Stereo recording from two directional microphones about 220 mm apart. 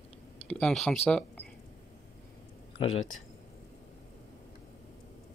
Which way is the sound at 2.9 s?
65° left (ahead or behind).